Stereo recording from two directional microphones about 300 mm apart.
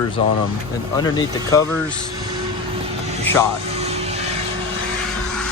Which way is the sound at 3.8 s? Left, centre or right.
Right.